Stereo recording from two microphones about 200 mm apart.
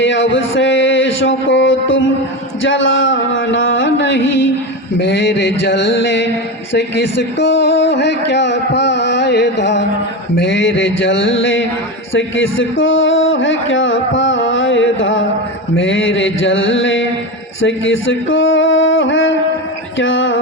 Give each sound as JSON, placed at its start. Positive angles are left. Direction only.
{"t": 0.0, "sound": "speech", "side_deg": 65}